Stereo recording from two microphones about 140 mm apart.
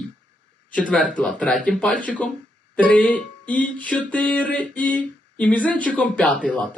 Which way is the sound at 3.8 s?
10° left (ahead or behind).